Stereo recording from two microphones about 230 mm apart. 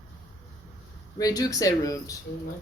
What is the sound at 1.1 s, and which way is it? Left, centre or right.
Speech, centre.